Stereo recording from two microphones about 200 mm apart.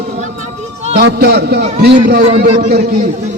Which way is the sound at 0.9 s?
55° right (ahead or behind).